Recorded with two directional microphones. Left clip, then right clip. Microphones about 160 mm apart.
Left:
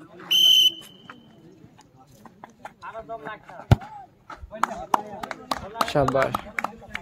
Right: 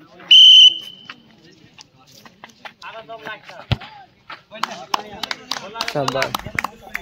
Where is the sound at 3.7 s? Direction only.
5° left (ahead or behind).